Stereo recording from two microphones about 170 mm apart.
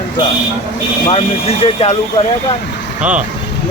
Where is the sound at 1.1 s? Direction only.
35° left (ahead or behind).